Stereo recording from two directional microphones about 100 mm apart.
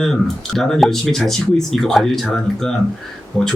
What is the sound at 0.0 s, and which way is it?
Speech, 5° left (ahead or behind).